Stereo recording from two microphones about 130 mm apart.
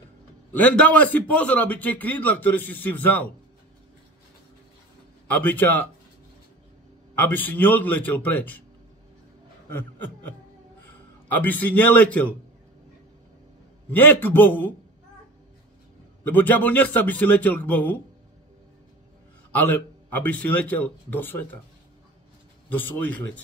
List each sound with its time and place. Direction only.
0.5 s a man's voice: 10° left (ahead or behind)
5.3 s a man's voice: 15° left (ahead or behind)
7.2 s a man's voice: 15° left (ahead or behind)
11.2 s a man's voice: 15° left (ahead or behind)
13.8 s a man's voice: 15° left (ahead or behind)
16.3 s a man's voice: 15° left (ahead or behind)
19.5 s a man's voice: 15° left (ahead or behind)
22.7 s a man's voice: 15° left (ahead or behind)